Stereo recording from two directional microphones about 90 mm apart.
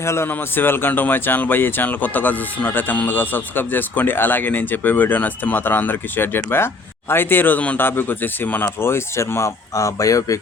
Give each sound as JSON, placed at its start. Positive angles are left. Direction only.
{"t": 0.0, "sound": "a man's voice", "side_deg": 30}